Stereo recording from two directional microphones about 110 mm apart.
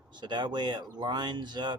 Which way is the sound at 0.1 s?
45° right (ahead or behind).